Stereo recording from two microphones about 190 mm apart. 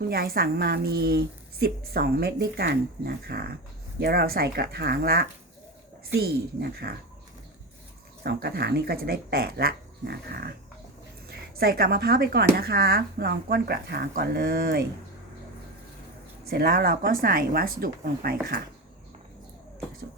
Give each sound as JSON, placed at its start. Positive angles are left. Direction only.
{"t": 0.1, "sound": "a woman's voice", "side_deg": -50}
{"t": 8.2, "sound": "speech", "side_deg": -55}
{"t": 16.5, "sound": "a woman's voice", "side_deg": -55}